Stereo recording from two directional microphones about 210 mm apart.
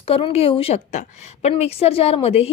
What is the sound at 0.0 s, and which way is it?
A woman's voice, 25° left (ahead or behind).